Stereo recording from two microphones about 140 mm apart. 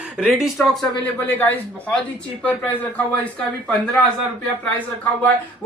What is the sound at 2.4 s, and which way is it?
Speech, 10° left (ahead or behind).